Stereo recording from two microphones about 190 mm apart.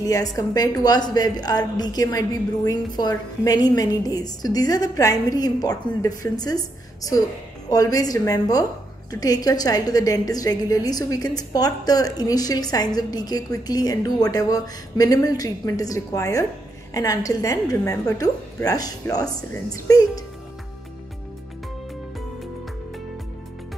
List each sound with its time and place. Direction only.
0.0 s a woman's voice: 20° left (ahead or behind)